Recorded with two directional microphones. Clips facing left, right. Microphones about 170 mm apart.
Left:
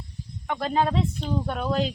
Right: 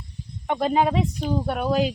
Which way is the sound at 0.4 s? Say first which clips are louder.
Right 4 dB; 20° right (ahead or behind).